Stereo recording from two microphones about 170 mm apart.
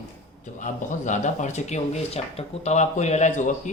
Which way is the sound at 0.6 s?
45° left (ahead or behind).